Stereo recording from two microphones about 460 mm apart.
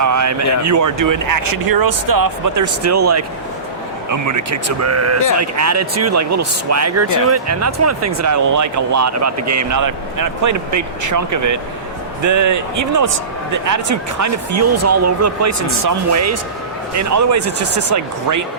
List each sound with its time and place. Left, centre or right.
0.0 s speech: right